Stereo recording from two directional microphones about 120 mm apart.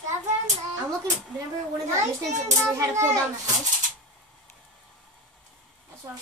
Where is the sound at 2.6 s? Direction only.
25° right (ahead or behind).